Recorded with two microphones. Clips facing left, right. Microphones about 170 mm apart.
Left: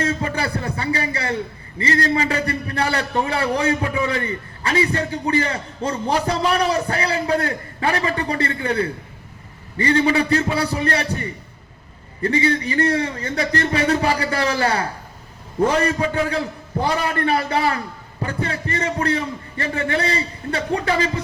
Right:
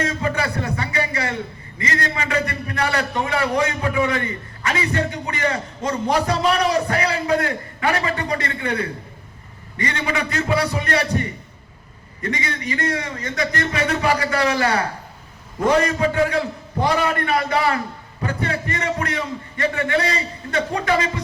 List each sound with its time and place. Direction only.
0.0 s a sound: 30° left (ahead or behind)
1.8 s a man's voice: 30° left (ahead or behind)
12.2 s a man's voice: 30° left (ahead or behind)
17.0 s a man's voice: 30° left (ahead or behind)